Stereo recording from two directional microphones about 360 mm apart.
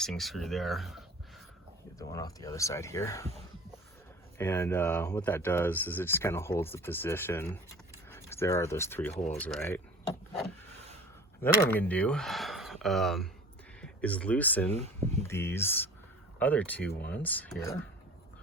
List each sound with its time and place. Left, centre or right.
0.0 s speech: centre
4.4 s speech: centre
11.7 s speech: centre
14.7 s speech: centre
15.3 s speech: centre